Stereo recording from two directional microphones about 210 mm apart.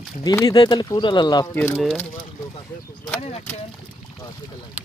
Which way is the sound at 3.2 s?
30° left (ahead or behind).